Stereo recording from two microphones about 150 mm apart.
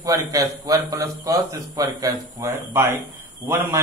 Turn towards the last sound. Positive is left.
turn(degrees=-20)  # may be behind; listen again after turning